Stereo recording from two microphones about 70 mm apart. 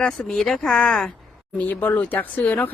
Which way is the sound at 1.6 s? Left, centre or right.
Left.